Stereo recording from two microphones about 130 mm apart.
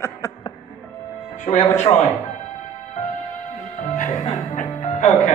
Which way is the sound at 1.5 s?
55° left (ahead or behind).